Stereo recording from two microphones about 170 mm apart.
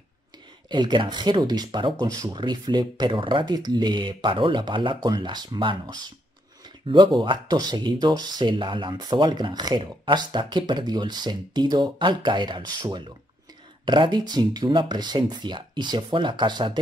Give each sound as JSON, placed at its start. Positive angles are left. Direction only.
{"t": 0.7, "sound": "speech", "side_deg": -25}
{"t": 7.2, "sound": "speech", "side_deg": -25}